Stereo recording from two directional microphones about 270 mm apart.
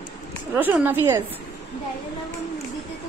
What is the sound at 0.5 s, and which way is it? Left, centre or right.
Speech, centre.